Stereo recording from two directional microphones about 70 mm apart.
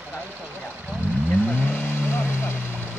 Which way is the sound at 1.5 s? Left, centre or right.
Left.